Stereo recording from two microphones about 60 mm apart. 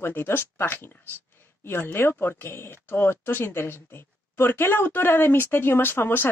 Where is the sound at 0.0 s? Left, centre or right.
Left.